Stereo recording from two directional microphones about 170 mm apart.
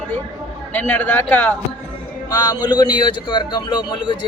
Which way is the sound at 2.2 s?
25° left (ahead or behind).